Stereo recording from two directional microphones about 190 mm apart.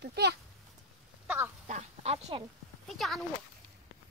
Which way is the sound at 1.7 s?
35° right (ahead or behind).